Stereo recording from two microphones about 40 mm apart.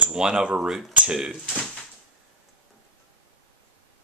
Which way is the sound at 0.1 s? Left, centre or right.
Centre.